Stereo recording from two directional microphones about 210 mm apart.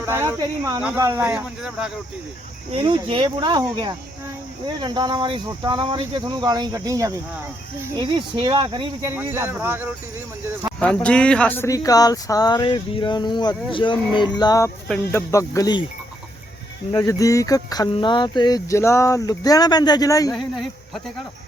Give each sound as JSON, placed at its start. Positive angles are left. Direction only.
{"t": 0.0, "sound": "speech", "side_deg": -10}
{"t": 2.7, "sound": "speech", "side_deg": -25}
{"t": 10.8, "sound": "speech", "side_deg": 5}
{"t": 13.8, "sound": "music", "side_deg": 25}
{"t": 14.8, "sound": "speech", "side_deg": 10}
{"t": 16.9, "sound": "speech", "side_deg": 15}
{"t": 20.3, "sound": "speech", "side_deg": 0}